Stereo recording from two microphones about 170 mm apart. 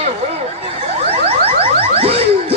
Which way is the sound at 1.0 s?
35° right (ahead or behind).